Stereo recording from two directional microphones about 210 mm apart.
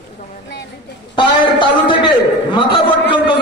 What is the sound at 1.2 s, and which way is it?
Speech, 25° left (ahead or behind).